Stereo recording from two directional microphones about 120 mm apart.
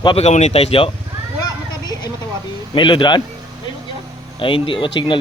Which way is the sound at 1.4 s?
35° left (ahead or behind).